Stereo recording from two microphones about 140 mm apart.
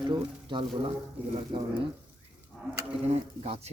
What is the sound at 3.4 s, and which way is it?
Speech, 50° right (ahead or behind).